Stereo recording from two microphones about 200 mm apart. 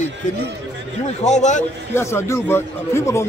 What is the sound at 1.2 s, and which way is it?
Speech, 35° left (ahead or behind).